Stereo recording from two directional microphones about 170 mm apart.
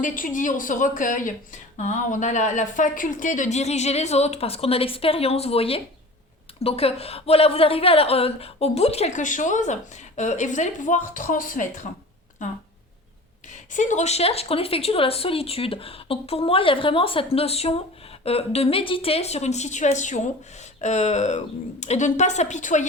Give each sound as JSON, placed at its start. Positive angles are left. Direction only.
{"t": 0.0, "sound": "a woman's voice", "side_deg": 50}
{"t": 13.7, "sound": "a woman's voice", "side_deg": 45}